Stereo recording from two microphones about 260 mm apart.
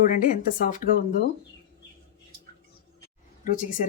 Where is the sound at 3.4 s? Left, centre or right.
Left.